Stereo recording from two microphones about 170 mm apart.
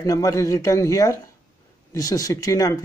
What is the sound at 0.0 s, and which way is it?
Speech, 20° left (ahead or behind).